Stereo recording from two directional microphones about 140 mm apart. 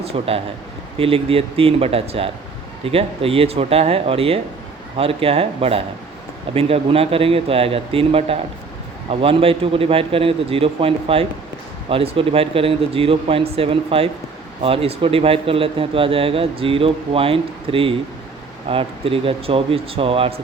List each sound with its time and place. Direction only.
0.0 s speech: 45° right (ahead or behind)